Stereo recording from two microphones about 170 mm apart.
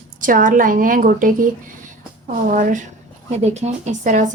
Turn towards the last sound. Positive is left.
turn(degrees=-45)  # may be behind; listen again after turning